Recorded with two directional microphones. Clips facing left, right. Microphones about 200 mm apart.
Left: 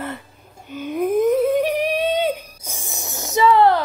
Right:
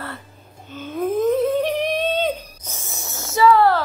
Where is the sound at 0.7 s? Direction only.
15° left (ahead or behind).